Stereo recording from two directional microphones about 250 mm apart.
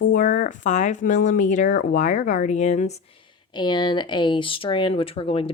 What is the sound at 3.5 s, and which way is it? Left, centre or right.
Speech, centre.